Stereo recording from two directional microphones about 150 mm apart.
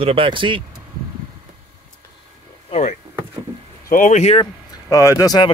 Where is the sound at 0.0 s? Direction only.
35° right (ahead or behind).